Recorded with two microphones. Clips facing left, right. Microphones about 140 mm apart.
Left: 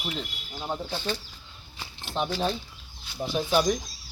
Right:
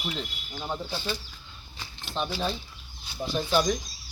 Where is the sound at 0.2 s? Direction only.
10° left (ahead or behind).